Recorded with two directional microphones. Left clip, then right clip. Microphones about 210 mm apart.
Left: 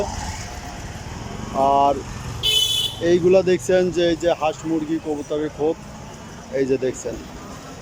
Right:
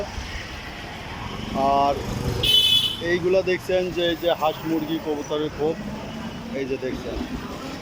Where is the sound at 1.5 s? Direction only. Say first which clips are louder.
Left 3 dB; 15° left (ahead or behind).